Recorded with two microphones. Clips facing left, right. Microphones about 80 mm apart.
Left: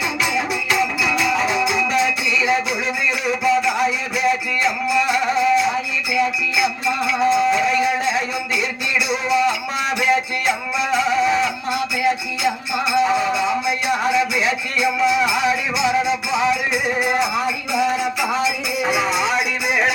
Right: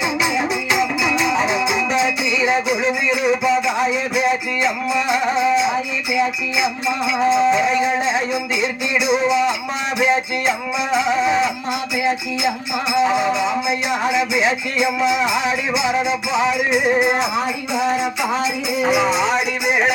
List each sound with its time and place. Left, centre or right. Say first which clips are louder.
0.2 s music: right 2 dB; centre
18.9 s music: right 3 dB; centre